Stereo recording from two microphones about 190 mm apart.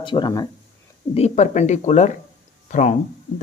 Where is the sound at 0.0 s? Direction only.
25° left (ahead or behind).